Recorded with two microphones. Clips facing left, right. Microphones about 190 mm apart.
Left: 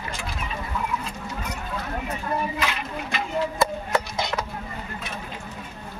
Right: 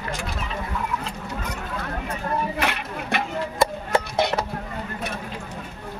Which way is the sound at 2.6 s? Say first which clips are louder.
Right 2 dB; 60° right (ahead or behind).